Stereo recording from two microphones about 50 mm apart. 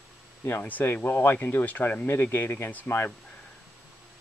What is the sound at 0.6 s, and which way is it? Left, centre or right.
Speech, left.